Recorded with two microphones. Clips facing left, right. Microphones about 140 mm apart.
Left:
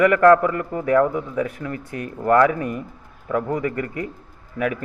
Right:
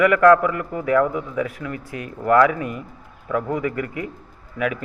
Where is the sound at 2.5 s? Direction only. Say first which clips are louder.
Left 1 dB; 45° left (ahead or behind).